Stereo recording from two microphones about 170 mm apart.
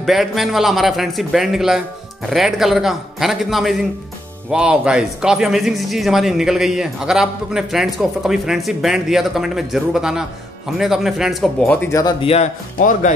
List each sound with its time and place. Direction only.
0.0 s speech: centre (ahead or behind); by 12.3 s 25° left (ahead or behind)
12.7 s speech: 50° left (ahead or behind)